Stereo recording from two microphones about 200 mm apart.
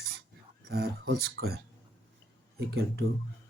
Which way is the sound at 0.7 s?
50° right (ahead or behind).